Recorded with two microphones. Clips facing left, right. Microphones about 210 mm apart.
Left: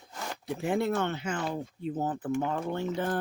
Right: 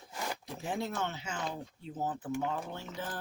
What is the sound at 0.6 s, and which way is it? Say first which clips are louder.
Speech: left 7 dB; 60° left (ahead or behind).